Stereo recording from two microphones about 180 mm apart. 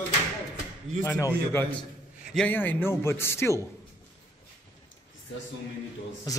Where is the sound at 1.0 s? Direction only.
15° left (ahead or behind).